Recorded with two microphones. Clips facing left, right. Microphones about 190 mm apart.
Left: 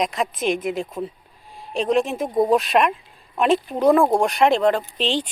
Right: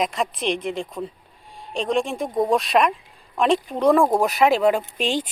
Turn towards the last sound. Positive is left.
turn(degrees=-10)  # may be behind; listen again after turning